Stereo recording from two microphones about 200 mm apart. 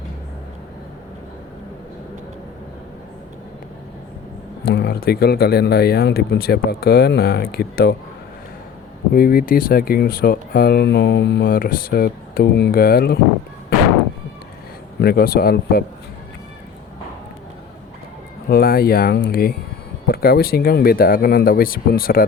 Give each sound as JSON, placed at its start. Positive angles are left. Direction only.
{"t": 4.6, "sound": "speech", "side_deg": 50}
{"t": 9.1, "sound": "speech", "side_deg": 45}
{"t": 14.9, "sound": "speech", "side_deg": 50}
{"t": 18.4, "sound": "speech", "side_deg": 50}